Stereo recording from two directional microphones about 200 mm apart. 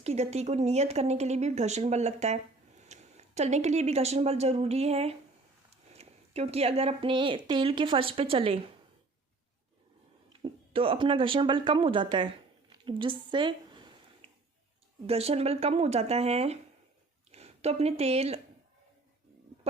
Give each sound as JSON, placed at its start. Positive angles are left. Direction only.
{"t": 0.0, "sound": "a woman's voice", "side_deg": -30}
{"t": 10.4, "sound": "a woman's voice", "side_deg": -30}
{"t": 12.7, "sound": "a sound", "side_deg": -25}
{"t": 15.0, "sound": "speech", "side_deg": -30}